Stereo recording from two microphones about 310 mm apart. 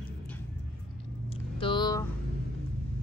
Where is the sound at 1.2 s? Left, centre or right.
Centre.